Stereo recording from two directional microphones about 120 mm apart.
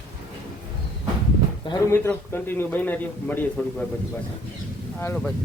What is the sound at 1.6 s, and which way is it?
Speech, 30° left (ahead or behind).